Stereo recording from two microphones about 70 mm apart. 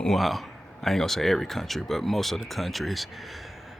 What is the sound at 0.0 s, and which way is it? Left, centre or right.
Speech, centre.